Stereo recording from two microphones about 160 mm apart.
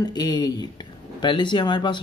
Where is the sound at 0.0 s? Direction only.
25° left (ahead or behind).